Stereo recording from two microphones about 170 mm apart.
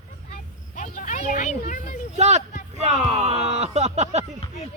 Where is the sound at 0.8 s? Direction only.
50° left (ahead or behind).